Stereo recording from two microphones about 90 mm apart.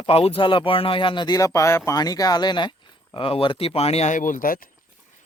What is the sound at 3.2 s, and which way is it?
Speech, 85° left.